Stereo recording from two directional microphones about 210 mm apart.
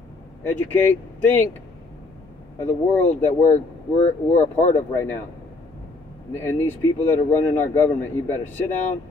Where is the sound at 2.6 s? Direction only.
10° left (ahead or behind).